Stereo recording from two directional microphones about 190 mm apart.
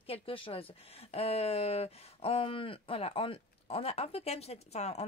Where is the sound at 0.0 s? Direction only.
30° left (ahead or behind).